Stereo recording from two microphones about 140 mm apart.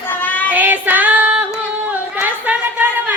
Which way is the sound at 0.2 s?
10° left (ahead or behind).